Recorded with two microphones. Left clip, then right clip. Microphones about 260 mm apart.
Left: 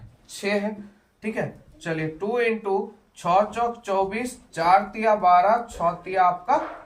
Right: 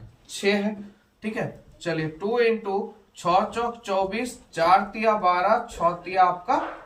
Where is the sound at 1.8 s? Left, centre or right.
Centre.